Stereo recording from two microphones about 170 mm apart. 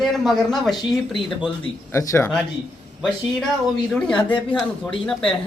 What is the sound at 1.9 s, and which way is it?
Speech, 15° left (ahead or behind).